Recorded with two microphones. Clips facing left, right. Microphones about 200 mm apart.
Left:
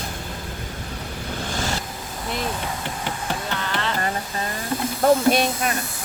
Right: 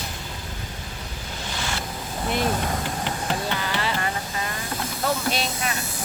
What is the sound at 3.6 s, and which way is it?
Music, 5° right (ahead or behind).